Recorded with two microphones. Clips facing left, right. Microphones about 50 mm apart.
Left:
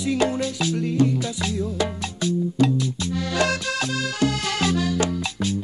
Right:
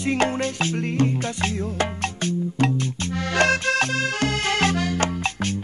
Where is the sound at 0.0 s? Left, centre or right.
Right.